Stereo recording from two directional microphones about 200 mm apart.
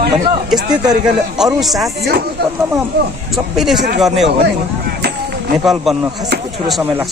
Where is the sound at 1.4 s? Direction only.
Centre (ahead or behind).